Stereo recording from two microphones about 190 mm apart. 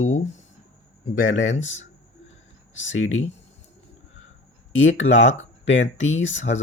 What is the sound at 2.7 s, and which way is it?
Speech, 85° left.